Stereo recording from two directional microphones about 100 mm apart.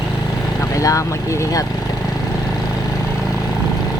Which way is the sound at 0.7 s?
35° left (ahead or behind).